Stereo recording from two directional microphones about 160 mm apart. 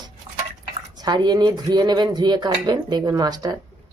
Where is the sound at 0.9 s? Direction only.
25° right (ahead or behind).